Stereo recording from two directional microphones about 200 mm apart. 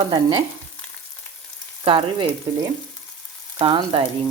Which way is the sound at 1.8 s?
25° right (ahead or behind).